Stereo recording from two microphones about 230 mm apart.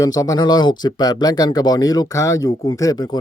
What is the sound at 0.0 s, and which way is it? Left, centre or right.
Speech, centre.